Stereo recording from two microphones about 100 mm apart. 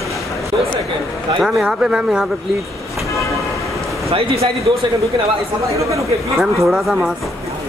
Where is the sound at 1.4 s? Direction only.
10° right (ahead or behind).